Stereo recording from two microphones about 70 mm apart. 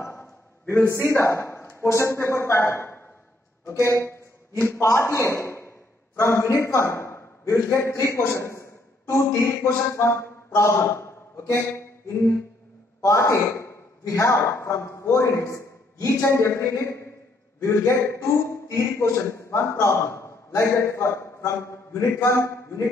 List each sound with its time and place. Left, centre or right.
0.0 s a man's voice: left
13.0 s a man's voice: left